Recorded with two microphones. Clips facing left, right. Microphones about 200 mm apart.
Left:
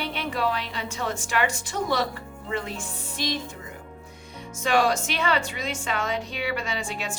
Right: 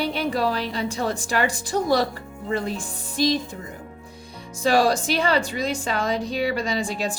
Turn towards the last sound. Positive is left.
turn(degrees=-35)  # may be behind; listen again after turning